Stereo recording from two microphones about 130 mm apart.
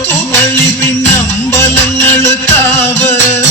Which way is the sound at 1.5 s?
20° left (ahead or behind).